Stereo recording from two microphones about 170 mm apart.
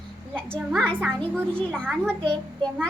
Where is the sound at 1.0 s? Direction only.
10° right (ahead or behind).